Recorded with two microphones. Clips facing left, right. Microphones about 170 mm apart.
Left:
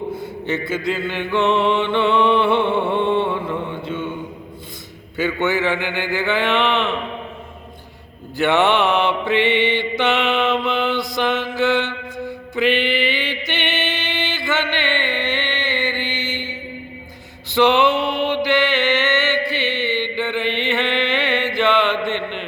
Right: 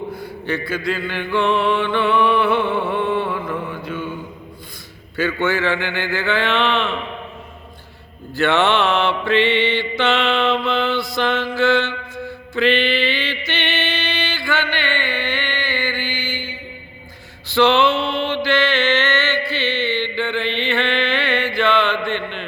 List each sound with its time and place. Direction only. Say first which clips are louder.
0.1 s mantra: left 1 dB; 25° left (ahead or behind)
5.1 s a man's voice: even; 20° left (ahead or behind)
8.4 s mantra: left 1 dB; 15° left (ahead or behind)